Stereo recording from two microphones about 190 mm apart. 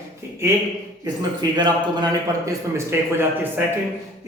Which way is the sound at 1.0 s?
20° right (ahead or behind).